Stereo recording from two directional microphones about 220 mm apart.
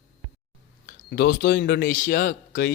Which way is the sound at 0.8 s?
45° left (ahead or behind).